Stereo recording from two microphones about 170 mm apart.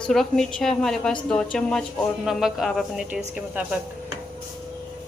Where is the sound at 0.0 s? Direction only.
5° left (ahead or behind).